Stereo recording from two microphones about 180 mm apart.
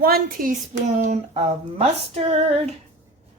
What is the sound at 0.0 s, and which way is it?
Hands, 55° right (ahead or behind).